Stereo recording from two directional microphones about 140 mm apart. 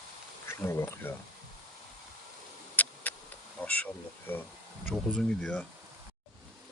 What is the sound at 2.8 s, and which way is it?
Tick, 10° left (ahead or behind).